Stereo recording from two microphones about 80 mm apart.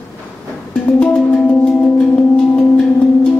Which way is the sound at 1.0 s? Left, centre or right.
Centre.